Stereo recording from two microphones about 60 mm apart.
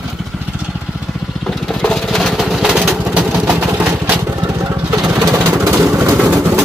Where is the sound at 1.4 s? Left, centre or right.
Centre.